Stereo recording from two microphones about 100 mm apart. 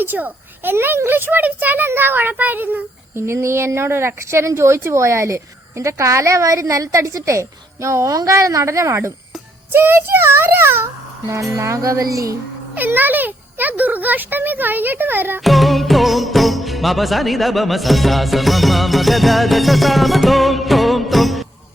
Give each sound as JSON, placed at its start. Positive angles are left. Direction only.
{"t": 0.0, "sound": "a child's voice", "side_deg": -20}
{"t": 11.5, "sound": "music", "side_deg": -30}
{"t": 12.7, "sound": "a child's voice", "side_deg": -20}
{"t": 15.4, "sound": "music", "side_deg": 0}